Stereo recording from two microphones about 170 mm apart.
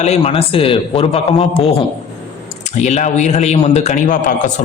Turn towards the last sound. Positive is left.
turn(degrees=50)  # may be behind; listen again after turning